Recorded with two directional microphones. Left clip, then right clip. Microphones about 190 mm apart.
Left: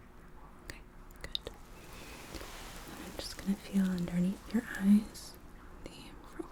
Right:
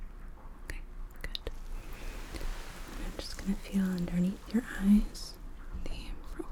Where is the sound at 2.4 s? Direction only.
15° right (ahead or behind).